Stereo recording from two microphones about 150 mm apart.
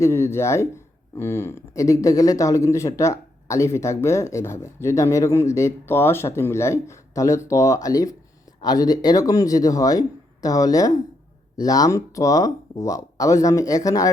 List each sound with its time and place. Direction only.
0.0 s speech: 15° left (ahead or behind)